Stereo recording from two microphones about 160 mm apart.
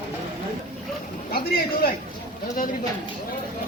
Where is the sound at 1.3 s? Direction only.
75° left (ahead or behind).